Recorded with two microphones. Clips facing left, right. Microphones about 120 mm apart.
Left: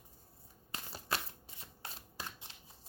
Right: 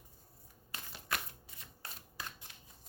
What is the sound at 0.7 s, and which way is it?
Shuffling cards, 30° left (ahead or behind).